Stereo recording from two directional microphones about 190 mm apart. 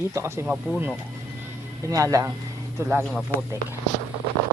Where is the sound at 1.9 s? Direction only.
15° right (ahead or behind).